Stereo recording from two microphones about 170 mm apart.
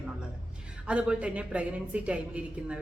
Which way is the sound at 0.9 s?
5° right (ahead or behind).